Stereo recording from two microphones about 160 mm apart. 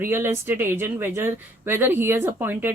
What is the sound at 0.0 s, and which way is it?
Speech, 15° right (ahead or behind).